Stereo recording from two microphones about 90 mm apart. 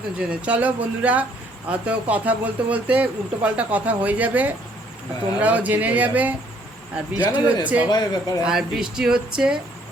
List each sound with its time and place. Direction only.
0.2 s speech: 15° right (ahead or behind)
7.3 s speech: 15° right (ahead or behind)
7.9 s speech: 45° left (ahead or behind)
8.4 s speech: 5° right (ahead or behind)